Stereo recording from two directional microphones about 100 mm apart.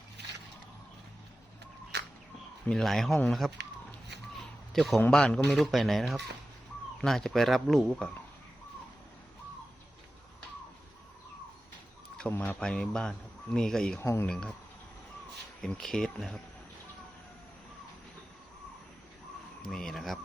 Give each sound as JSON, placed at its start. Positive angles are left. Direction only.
{"t": 2.6, "sound": "speech", "side_deg": 5}
{"t": 4.4, "sound": "a sound", "side_deg": 0}
{"t": 5.1, "sound": "speech", "side_deg": 5}
{"t": 12.3, "sound": "speech", "side_deg": 15}
{"t": 14.0, "sound": "speech", "side_deg": 30}
{"t": 14.3, "sound": "speech", "side_deg": 5}
{"t": 15.6, "sound": "speech", "side_deg": 5}
{"t": 19.6, "sound": "speech", "side_deg": 5}